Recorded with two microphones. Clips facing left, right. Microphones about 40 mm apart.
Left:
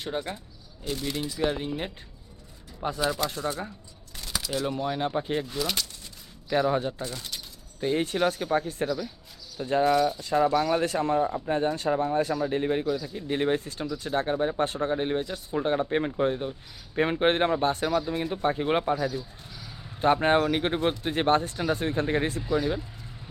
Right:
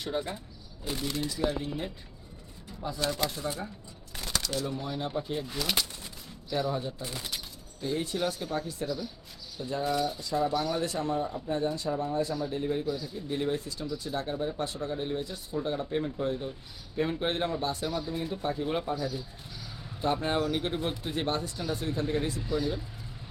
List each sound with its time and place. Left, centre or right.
0.0 s speech: left
1.0 s speech: centre
1.4 s speech: left
2.8 s speech: left
3.2 s speech: centre
4.3 s a sound: centre
4.8 s speech: left
5.5 s speech: centre
6.5 s speech: left
7.0 s speech: centre
7.8 s speech: left
9.8 s speech: left